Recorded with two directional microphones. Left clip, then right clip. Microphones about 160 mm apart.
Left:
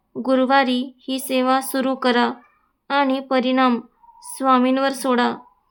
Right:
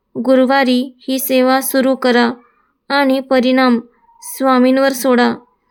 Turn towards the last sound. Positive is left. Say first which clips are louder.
# right 6 dB
turn(degrees=-20)  # may be behind; listen again after turning